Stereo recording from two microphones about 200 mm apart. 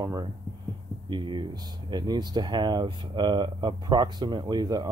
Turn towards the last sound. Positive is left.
turn(degrees=-20)  # may be behind; listen again after turning